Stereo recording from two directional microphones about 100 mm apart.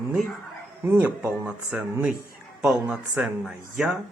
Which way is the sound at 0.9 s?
25° right (ahead or behind).